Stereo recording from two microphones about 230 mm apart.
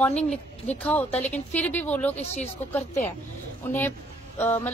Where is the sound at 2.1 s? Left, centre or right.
Left.